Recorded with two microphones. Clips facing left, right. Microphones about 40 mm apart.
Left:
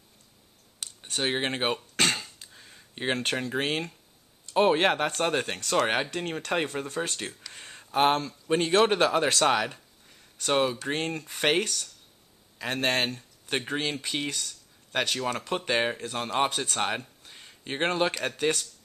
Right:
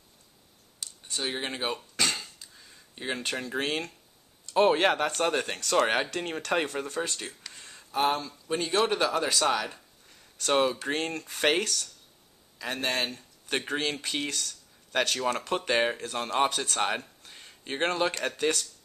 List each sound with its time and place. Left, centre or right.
0.7 s a sound: left
3.3 s speech: centre
7.5 s a sound: left
8.0 s speech: left
9.7 s speech: centre
12.6 s speech: left
13.1 s speech: centre
17.2 s a sound: centre
17.7 s speech: centre